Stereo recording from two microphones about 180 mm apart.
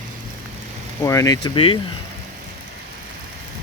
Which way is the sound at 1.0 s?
20° left (ahead or behind).